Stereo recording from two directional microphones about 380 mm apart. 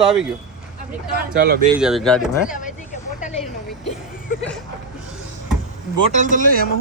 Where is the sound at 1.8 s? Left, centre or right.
Centre.